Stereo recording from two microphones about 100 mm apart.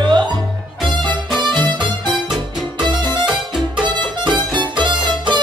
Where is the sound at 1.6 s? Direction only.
50° right (ahead or behind).